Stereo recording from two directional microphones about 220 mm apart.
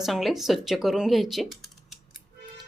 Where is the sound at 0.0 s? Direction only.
Centre (ahead or behind).